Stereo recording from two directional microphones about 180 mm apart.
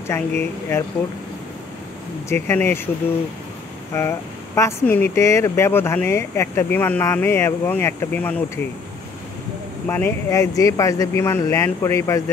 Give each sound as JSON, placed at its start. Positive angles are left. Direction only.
{"t": 0.0, "sound": "speech", "side_deg": 15}
{"t": 2.2, "sound": "speech", "side_deg": 15}
{"t": 3.9, "sound": "speech", "side_deg": 15}
{"t": 9.8, "sound": "speech", "side_deg": 15}